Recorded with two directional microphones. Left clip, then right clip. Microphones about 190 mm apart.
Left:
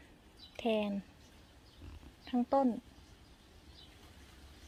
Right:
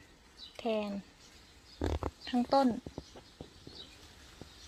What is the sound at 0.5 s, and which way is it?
Speech, 10° left (ahead or behind).